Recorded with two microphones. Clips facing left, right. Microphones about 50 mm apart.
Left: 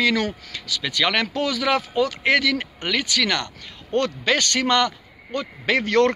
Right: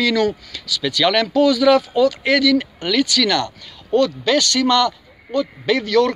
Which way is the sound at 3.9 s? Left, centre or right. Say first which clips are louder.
Right 5 dB; left.